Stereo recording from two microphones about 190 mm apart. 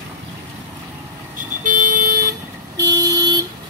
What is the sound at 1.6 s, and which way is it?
Vehicle, 45° right (ahead or behind).